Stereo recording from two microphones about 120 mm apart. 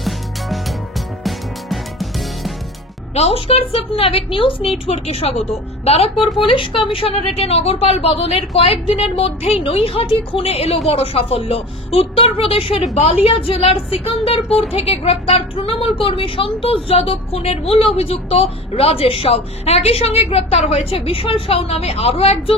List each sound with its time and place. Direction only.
0.0 s music: centre (ahead or behind)
3.2 s a woman's voice: 55° left (ahead or behind)